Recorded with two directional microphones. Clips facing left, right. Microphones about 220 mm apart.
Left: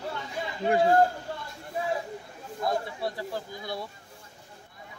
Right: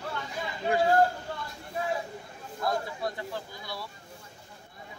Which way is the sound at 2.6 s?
20° left (ahead or behind).